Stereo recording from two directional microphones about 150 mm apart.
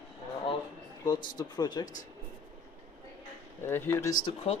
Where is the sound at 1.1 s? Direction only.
30° left (ahead or behind).